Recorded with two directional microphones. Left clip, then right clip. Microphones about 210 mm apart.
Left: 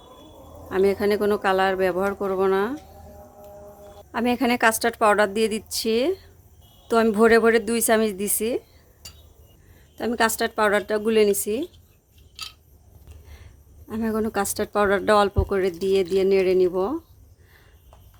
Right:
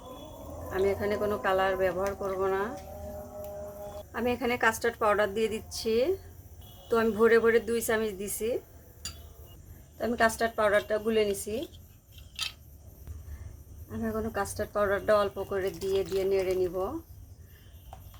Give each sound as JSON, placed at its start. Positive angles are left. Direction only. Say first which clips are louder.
{"t": 0.7, "sound": "speech", "louder": "left 8 dB", "side_deg": 55}
{"t": 4.1, "sound": "speech", "louder": "left 7 dB", "side_deg": 55}
{"t": 10.0, "sound": "speech", "louder": "left 4 dB", "side_deg": 55}
{"t": 13.9, "sound": "speech", "louder": "left 7 dB", "side_deg": 55}